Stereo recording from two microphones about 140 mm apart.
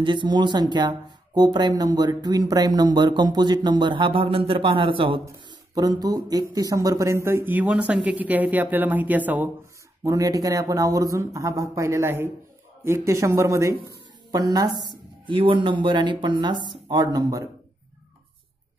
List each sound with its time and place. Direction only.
0.0 s speech: 35° right (ahead or behind)
5.2 s speech: 25° right (ahead or behind); by 9.5 s 10° right (ahead or behind)
10.0 s speech: 25° right (ahead or behind)